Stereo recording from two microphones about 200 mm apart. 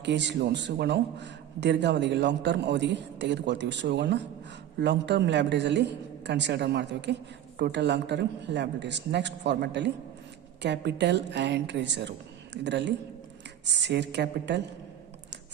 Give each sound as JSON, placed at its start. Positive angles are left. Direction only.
{"t": 0.0, "sound": "a man's voice", "side_deg": -60}